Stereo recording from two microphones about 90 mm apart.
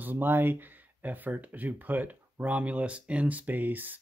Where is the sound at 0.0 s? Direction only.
20° right (ahead or behind).